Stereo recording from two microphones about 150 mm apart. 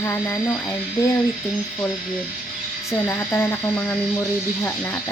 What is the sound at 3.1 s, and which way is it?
Speech, 15° left (ahead or behind).